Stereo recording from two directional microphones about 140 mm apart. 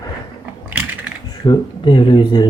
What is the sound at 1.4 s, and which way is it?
Speech, 35° left (ahead or behind).